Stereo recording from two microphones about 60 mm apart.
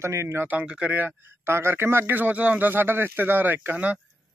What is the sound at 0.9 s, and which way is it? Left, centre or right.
Speech, right.